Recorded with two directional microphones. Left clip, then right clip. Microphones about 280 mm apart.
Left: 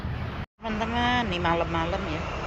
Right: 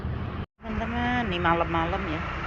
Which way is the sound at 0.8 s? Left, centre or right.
Centre.